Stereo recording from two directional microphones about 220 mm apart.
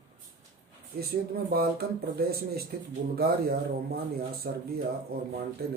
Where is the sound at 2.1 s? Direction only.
45° right (ahead or behind).